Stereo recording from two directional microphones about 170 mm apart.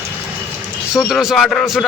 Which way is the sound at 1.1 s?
Centre (ahead or behind).